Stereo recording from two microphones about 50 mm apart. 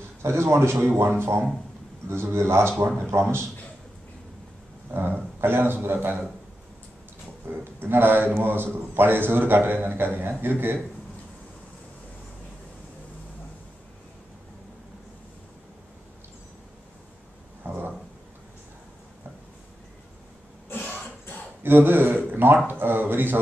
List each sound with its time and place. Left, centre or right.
0.2 s speech: right
4.9 s a man's voice: right
7.4 s a man's voice: right
17.6 s a sound: right
21.6 s a man's voice: right